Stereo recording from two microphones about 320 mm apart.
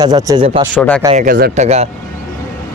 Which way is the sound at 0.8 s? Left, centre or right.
Centre.